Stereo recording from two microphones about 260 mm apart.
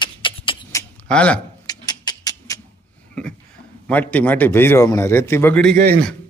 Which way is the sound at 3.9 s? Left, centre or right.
Centre.